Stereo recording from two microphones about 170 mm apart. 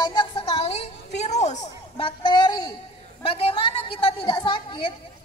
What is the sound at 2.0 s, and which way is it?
A woman's voice, 30° left (ahead or behind).